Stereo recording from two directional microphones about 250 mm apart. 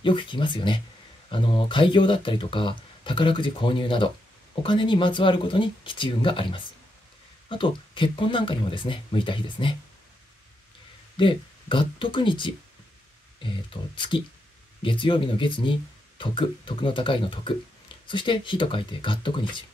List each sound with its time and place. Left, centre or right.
0.0 s speech: centre
11.1 s speech: centre